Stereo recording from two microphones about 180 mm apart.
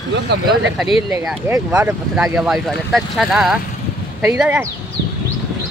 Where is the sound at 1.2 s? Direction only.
Centre (ahead or behind).